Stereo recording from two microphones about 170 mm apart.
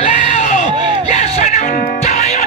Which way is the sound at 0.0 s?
35° left (ahead or behind).